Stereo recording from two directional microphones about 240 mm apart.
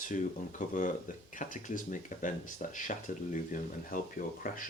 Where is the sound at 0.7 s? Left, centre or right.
Left.